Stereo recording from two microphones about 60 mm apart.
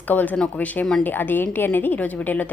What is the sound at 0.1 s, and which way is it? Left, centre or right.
A woman's voice, left.